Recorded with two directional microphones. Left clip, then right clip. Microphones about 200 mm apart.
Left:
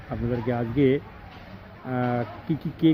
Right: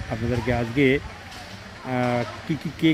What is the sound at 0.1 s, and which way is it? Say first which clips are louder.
Speech: right 2 dB; centre (ahead or behind).